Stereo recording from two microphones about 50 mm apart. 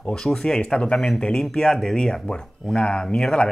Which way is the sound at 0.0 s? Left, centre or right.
Centre.